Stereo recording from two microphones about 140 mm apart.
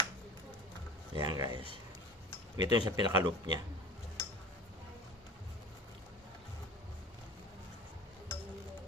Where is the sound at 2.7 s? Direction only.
30° right (ahead or behind).